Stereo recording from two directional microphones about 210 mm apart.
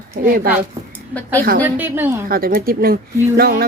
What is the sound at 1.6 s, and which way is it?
Speech, 10° right (ahead or behind).